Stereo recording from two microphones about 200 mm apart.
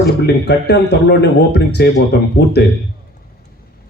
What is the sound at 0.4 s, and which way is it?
A man's voice, 55° left (ahead or behind).